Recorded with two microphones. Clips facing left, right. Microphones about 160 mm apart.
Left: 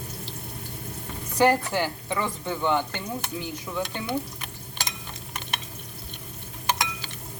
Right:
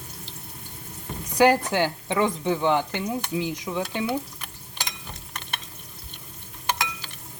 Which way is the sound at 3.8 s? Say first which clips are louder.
Right 1 dB; 5° right (ahead or behind).